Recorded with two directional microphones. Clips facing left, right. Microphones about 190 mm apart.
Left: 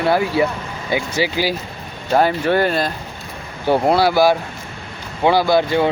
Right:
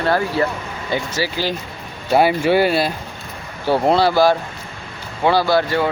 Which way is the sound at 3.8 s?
5° left (ahead or behind).